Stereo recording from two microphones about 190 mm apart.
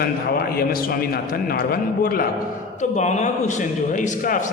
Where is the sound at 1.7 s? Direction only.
50° left (ahead or behind).